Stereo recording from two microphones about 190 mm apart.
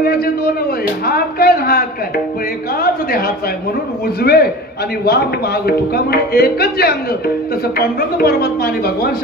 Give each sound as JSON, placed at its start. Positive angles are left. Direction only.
{"t": 0.0, "sound": "a man's voice", "side_deg": 50}